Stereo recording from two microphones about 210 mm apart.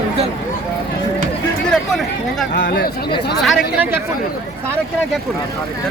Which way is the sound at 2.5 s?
45° left (ahead or behind).